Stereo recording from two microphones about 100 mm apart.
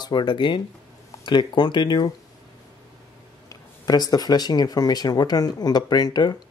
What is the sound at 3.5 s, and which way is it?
Speech, 40° left (ahead or behind).